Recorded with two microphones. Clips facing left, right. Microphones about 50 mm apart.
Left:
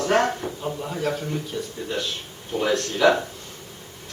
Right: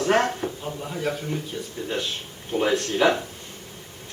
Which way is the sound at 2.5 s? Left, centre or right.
Centre.